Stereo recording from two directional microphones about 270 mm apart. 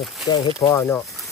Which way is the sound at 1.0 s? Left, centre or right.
Centre.